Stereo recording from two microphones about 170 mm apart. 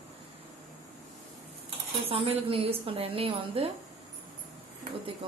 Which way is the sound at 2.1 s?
35° right (ahead or behind).